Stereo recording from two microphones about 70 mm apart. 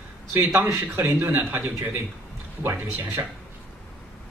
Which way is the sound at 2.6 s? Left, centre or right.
Right.